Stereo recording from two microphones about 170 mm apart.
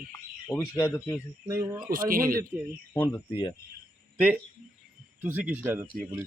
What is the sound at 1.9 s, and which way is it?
Speech, 55° right (ahead or behind).